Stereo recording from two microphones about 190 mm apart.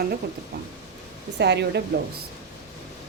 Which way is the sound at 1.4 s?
60° right (ahead or behind).